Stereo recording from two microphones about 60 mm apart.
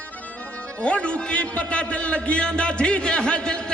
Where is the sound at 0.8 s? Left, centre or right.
Centre.